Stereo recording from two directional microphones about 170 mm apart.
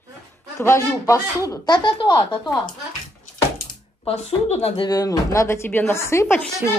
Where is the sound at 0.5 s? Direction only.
15° left (ahead or behind).